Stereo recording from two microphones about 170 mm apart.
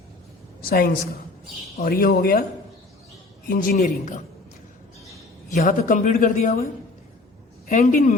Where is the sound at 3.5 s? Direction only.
55° left (ahead or behind).